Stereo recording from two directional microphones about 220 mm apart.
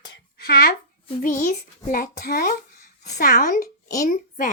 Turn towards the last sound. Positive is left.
turn(degrees=40)  # may be behind; listen again after turning